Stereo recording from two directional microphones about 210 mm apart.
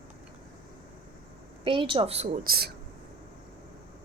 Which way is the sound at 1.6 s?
25° right (ahead or behind).